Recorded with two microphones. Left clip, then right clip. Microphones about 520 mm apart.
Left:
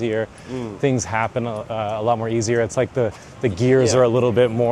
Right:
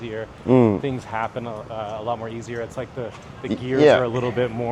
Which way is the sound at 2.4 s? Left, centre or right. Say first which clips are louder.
Left 10 dB; left.